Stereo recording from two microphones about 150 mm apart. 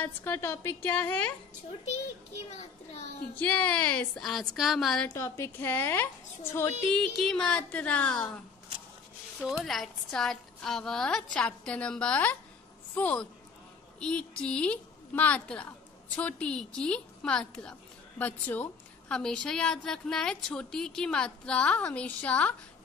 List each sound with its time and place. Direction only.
0.0 s a woman's voice: 15° left (ahead or behind)
3.3 s a woman's voice: 10° left (ahead or behind)
5.1 s a woman's voice: 20° left (ahead or behind)
7.2 s a woman's voice: 5° left (ahead or behind)
9.4 s a woman's voice: centre (ahead or behind)
13.9 s a sound: 5° left (ahead or behind)
14.4 s a woman's voice: 10° left (ahead or behind)